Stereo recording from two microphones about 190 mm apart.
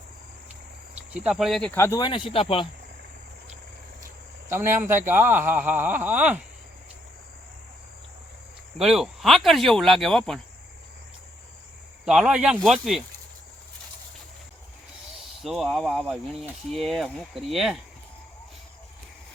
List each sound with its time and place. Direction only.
0.9 s speech: 5° right (ahead or behind)
1.7 s speech: 15° left (ahead or behind)
4.0 s speech: 15° right (ahead or behind)
8.8 s speech: centre (ahead or behind)
12.0 s speech: 5° right (ahead or behind)
15.4 s speech: centre (ahead or behind)